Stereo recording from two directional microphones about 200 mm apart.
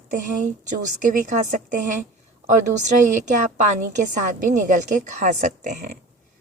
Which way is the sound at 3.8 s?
40° right (ahead or behind).